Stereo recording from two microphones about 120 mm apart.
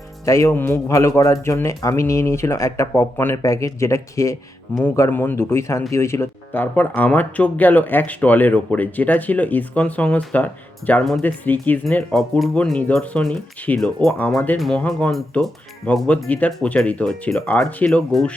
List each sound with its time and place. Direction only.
0.3 s a man's voice: 25° left (ahead or behind); by 18.3 s 5° left (ahead or behind)